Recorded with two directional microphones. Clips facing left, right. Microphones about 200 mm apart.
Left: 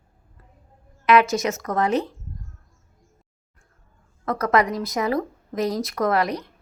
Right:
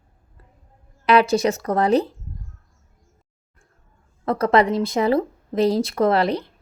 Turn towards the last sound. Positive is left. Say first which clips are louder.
# right 4 dB
turn(degrees=-30)  # may be behind; listen again after turning